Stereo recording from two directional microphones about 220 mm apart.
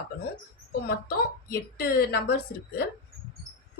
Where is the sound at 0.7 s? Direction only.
45° left (ahead or behind).